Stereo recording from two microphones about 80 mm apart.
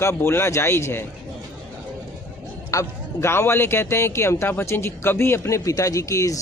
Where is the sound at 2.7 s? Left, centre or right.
Left.